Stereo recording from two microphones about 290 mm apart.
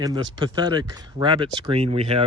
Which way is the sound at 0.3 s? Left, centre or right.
Centre.